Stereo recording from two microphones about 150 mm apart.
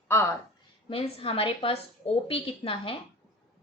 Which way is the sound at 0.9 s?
40° left (ahead or behind).